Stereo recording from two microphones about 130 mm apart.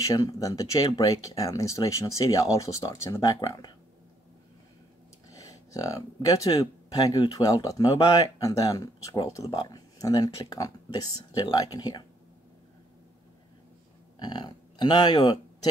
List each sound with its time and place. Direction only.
0.0 s speech: 25° left (ahead or behind)
5.3 s speech: 25° left (ahead or behind)
14.2 s speech: 35° left (ahead or behind)